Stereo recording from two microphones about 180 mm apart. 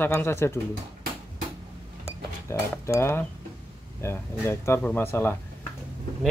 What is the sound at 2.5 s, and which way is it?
Speech, 15° left (ahead or behind).